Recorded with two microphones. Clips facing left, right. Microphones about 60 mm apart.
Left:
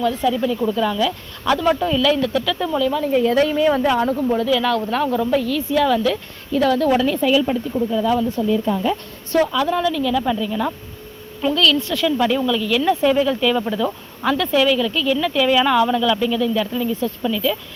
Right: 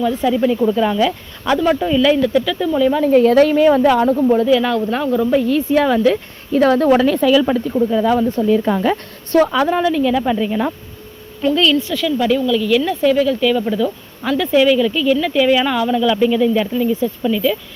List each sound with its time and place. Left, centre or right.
0.0 s speech: centre
1.5 s speech: centre
2.9 s speech: right
4.1 s speech: right; by 5.4 s centre
5.4 s speech: right
7.0 s speech: right
7.9 s speech: right
8.4 s speech: right
9.3 s speech: right
9.6 s speech: right
11.5 s speech: right
11.8 s speech: centre